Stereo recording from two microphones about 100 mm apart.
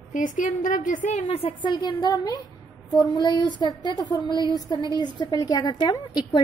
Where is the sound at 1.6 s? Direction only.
50° left (ahead or behind).